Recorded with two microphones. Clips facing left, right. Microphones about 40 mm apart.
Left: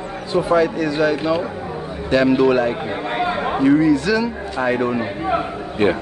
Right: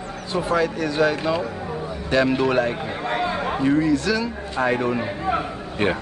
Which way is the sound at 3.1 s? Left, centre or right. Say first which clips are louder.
Left 3 dB; centre.